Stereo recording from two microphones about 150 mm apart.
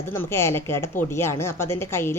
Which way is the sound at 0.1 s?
15° left (ahead or behind).